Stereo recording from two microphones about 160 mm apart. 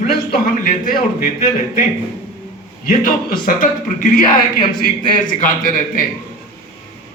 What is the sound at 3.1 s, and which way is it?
A man's voice, 60° left (ahead or behind).